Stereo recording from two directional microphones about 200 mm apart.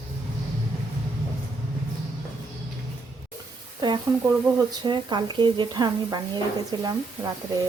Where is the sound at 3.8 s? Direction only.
20° right (ahead or behind).